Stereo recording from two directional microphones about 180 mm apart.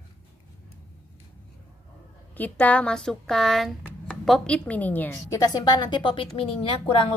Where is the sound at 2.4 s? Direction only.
10° left (ahead or behind).